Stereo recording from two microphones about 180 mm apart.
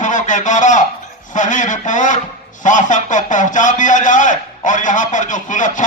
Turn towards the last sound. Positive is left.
turn(degrees=45)  # may be behind; listen again after turning